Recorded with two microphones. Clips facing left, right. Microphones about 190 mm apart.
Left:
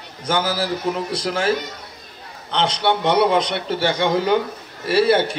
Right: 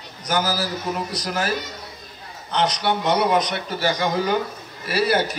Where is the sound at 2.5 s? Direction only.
25° left (ahead or behind).